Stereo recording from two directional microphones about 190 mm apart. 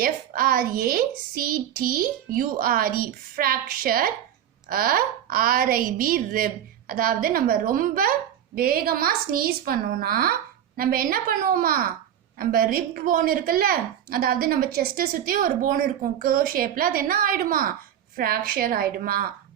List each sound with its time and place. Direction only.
0.0 s a woman's voice: 50° right (ahead or behind)